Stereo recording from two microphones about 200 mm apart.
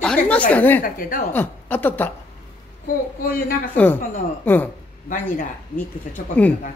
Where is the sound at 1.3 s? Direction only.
10° left (ahead or behind).